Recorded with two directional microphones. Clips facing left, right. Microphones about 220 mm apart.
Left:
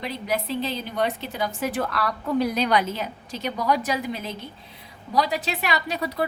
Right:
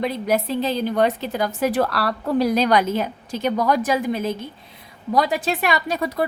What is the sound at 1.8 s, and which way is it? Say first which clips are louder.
Speech: right 5 dB; 80° right.